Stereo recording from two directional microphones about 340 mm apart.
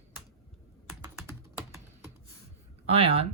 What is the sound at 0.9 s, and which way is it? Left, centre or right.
Typing, centre.